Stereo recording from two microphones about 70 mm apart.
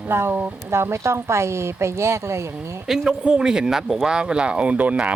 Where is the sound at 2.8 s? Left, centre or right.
Centre.